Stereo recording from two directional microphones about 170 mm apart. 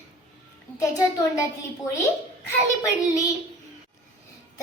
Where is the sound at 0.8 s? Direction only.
20° left (ahead or behind).